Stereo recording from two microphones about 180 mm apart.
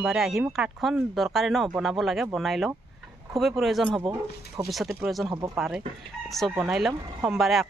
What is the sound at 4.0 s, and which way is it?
Speech, 20° right (ahead or behind).